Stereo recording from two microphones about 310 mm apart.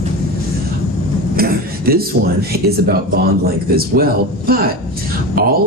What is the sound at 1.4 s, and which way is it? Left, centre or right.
Speech, right.